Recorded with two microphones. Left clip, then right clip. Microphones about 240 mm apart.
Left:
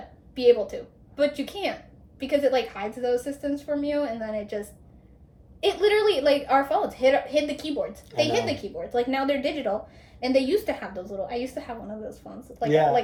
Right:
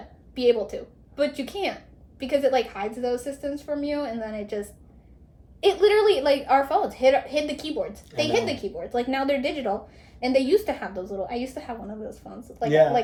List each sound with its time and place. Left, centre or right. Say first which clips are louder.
0.3 s a woman's voice: left 2 dB; centre
12.6 s a woman's voice: right 2 dB; centre